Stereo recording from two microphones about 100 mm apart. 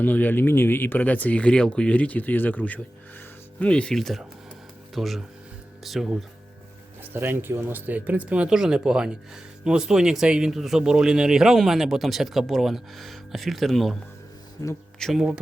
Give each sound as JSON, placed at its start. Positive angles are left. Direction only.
{"t": 0.0, "sound": "speech", "side_deg": 15}
{"t": 7.1, "sound": "speech", "side_deg": -20}
{"t": 14.6, "sound": "speech", "side_deg": 30}
{"t": 14.9, "sound": "speech", "side_deg": 5}